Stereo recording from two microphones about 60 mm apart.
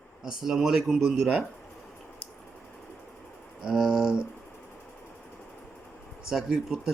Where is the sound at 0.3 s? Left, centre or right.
Centre.